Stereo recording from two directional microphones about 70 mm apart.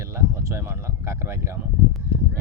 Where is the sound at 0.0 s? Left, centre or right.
Right.